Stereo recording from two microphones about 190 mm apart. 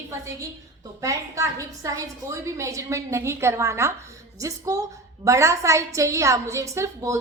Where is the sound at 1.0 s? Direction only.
15° right (ahead or behind).